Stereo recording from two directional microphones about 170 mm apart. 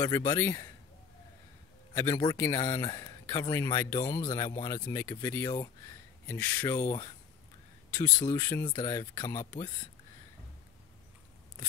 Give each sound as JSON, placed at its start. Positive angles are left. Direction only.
{"t": 0.0, "sound": "speech", "side_deg": 20}
{"t": 2.0, "sound": "speech", "side_deg": 20}
{"t": 8.2, "sound": "speech", "side_deg": 20}